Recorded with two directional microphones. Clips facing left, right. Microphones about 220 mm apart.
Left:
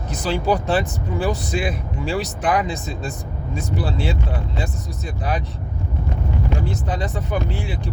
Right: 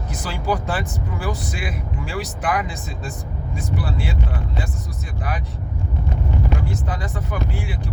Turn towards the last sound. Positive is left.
turn(degrees=20)  # may be behind; listen again after turning